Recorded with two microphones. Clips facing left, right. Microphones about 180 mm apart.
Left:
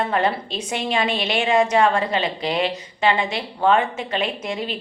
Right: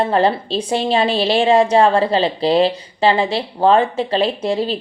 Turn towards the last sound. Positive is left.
turn(degrees=-30)  # may be behind; listen again after turning